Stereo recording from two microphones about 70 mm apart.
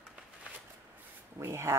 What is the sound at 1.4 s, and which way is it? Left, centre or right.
Speech, right.